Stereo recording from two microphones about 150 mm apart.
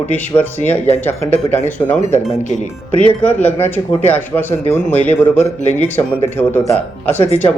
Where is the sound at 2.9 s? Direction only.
40° right (ahead or behind).